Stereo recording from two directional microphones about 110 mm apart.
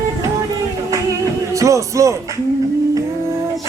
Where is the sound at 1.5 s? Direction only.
30° right (ahead or behind).